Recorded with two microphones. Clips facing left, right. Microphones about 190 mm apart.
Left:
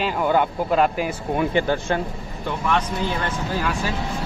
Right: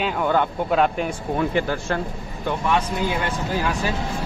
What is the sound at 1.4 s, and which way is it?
Speech, 20° left (ahead or behind).